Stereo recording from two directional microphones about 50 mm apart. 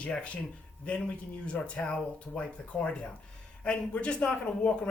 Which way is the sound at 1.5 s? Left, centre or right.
Left.